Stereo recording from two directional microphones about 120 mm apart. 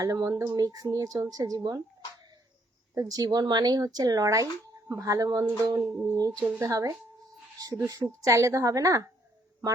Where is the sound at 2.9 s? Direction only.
30° right (ahead or behind).